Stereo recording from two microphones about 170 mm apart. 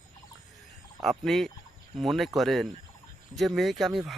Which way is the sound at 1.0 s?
Centre (ahead or behind).